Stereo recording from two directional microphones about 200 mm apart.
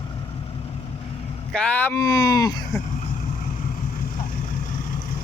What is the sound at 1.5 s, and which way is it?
Speech, 5° left (ahead or behind).